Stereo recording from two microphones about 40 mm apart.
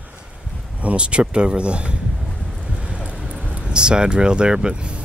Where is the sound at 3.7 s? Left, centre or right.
Right.